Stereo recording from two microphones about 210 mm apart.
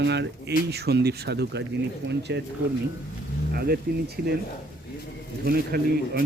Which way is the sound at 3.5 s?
45° right (ahead or behind).